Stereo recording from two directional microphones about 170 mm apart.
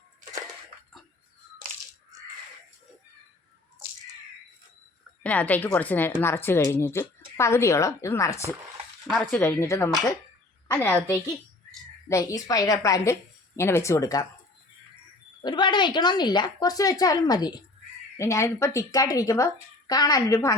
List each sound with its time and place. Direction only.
5.2 s a woman's voice: 10° left (ahead or behind)
9.0 s speech: centre (ahead or behind)
9.3 s a woman's voice: 15° left (ahead or behind)
12.0 s a woman's voice: 20° left (ahead or behind)
15.4 s a woman's voice: 25° left (ahead or behind)